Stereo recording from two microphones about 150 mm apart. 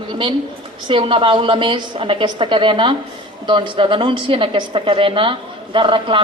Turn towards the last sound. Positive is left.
turn(degrees=-35)  # may be behind; listen again after turning